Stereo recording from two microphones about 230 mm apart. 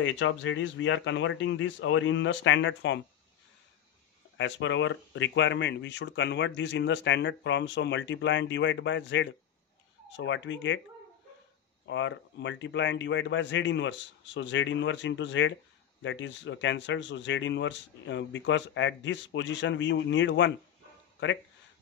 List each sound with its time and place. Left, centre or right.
0.0 s speech: left
4.4 s speech: left
11.9 s speech: left